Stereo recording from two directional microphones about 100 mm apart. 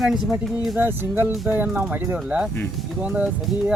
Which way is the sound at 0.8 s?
20° right (ahead or behind).